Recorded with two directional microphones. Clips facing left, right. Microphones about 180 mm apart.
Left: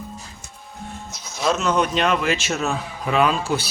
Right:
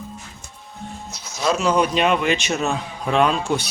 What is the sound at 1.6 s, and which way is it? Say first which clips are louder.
Speech: right 4 dB; 10° right (ahead or behind).